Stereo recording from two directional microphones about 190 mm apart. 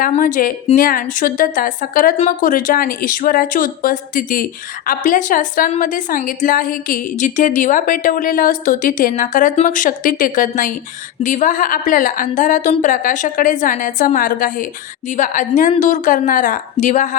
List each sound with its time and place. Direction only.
0.1 s a woman's voice: 45° left (ahead or behind)